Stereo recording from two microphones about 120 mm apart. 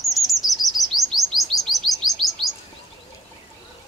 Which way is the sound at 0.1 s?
Centre (ahead or behind).